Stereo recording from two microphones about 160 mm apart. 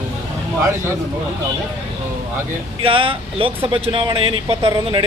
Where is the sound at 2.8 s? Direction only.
35° right (ahead or behind).